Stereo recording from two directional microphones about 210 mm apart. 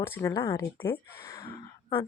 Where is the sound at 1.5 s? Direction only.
25° left (ahead or behind).